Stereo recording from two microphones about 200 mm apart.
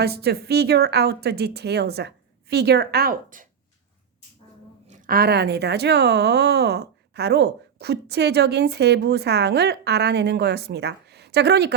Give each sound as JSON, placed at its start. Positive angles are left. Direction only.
{"t": 0.0, "sound": "a woman's voice", "side_deg": -50}
{"t": 4.9, "sound": "speech", "side_deg": -45}